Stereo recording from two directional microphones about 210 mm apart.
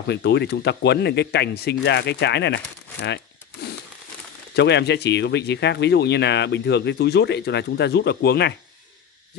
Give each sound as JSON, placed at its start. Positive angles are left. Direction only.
{"t": 0.1, "sound": "speech", "side_deg": 55}
{"t": 4.6, "sound": "speech", "side_deg": 55}